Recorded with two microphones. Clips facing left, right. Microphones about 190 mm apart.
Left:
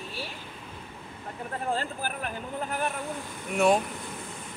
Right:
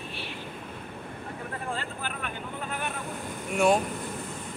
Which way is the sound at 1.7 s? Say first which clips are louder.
Left 3 dB; 35° left (ahead or behind).